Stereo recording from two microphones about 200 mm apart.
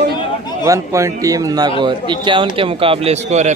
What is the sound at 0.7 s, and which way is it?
A man's voice, 15° right (ahead or behind).